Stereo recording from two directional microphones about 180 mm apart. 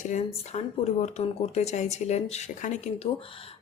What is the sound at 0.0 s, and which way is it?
A woman's voice, 40° left (ahead or behind).